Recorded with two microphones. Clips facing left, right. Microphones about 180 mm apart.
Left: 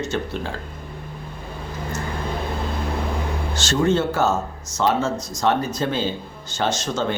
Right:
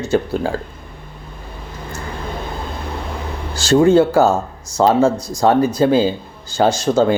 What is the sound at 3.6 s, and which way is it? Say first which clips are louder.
A man's voice: right 9 dB; 35° right (ahead or behind).